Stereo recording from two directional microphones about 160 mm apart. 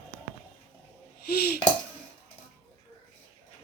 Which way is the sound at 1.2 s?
80° left.